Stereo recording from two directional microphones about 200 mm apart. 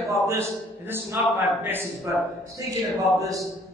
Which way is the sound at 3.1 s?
15° right (ahead or behind).